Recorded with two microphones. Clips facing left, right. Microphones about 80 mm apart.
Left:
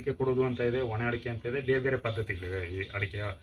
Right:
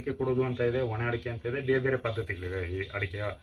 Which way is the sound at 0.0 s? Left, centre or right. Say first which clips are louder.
Left 1 dB; centre.